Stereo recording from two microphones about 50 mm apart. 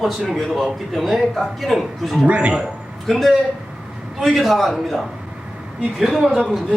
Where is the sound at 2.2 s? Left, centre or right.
Right.